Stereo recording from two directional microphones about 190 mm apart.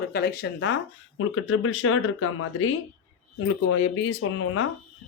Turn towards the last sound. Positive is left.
turn(degrees=90)